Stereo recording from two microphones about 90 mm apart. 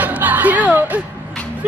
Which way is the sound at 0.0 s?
20° right (ahead or behind).